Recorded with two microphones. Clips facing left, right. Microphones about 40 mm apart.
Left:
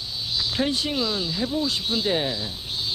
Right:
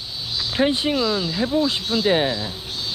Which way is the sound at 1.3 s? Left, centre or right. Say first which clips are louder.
Right 5 dB; right.